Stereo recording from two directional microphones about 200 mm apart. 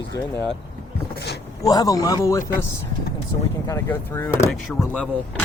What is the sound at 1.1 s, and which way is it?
Speech, 55° left (ahead or behind).